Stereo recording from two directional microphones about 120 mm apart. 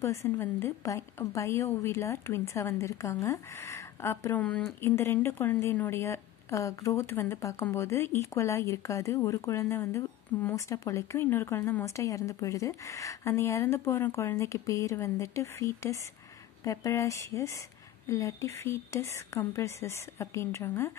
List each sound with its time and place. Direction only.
0.0 s speech: 25° left (ahead or behind)